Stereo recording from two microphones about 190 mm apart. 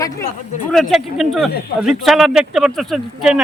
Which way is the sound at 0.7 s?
Centre (ahead or behind).